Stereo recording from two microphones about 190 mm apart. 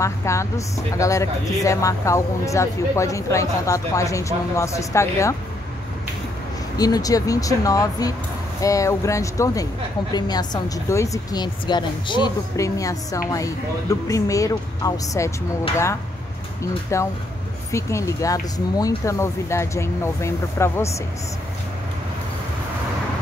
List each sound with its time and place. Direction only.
0.0 s speech: 15° left (ahead or behind)
6.8 s speech: 20° left (ahead or behind)
16.9 s speech: 15° left (ahead or behind)